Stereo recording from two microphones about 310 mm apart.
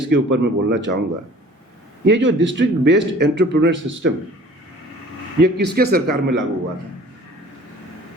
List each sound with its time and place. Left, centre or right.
0.0 s a man's voice: right
2.0 s a man's voice: right
5.4 s a man's voice: right